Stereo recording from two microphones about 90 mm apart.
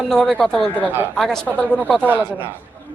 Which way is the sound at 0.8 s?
20° right (ahead or behind).